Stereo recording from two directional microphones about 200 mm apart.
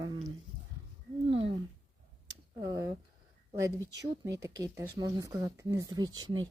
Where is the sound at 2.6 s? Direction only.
20° right (ahead or behind).